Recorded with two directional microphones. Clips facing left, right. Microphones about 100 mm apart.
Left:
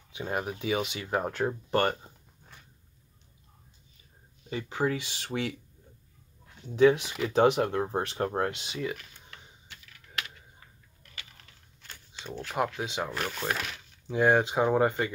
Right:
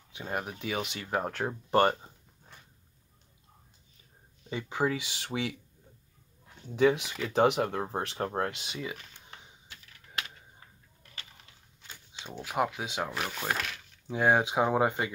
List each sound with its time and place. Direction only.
0.1 s speech: 5° left (ahead or behind)
1.7 s speech: 20° right (ahead or behind)
4.7 s speech: 5° right (ahead or behind)
6.7 s speech: 5° right (ahead or behind)
10.1 s a sound: 35° right (ahead or behind)
11.9 s speech: 10° right (ahead or behind)